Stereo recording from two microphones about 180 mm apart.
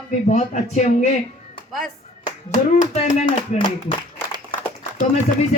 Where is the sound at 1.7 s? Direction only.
Centre (ahead or behind).